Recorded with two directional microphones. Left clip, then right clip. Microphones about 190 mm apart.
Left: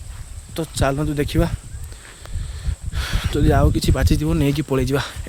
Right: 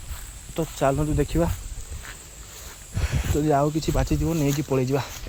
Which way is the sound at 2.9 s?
30° left (ahead or behind).